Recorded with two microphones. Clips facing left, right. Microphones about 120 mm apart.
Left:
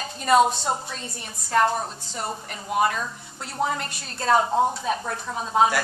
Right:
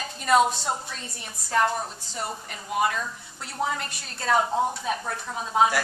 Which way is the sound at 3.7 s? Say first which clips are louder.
Left 3 dB; 35° left (ahead or behind).